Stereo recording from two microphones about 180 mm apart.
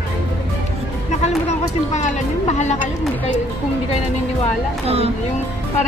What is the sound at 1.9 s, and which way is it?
Speech, 40° left (ahead or behind).